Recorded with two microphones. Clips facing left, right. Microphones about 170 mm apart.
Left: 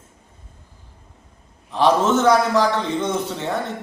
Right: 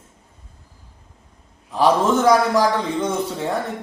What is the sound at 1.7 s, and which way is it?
A man's voice, 10° right (ahead or behind).